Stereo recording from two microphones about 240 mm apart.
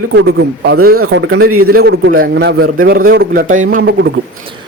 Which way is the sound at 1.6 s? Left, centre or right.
Right.